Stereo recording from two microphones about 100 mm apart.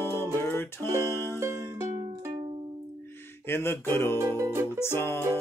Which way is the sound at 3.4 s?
25° left (ahead or behind).